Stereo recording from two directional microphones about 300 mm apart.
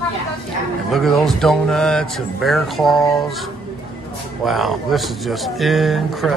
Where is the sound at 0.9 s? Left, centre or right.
Centre.